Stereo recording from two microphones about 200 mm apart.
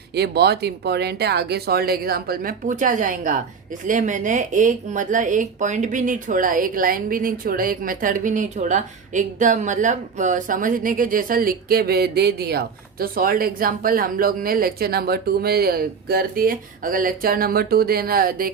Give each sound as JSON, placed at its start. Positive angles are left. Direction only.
{"t": 0.1, "sound": "speech", "side_deg": -55}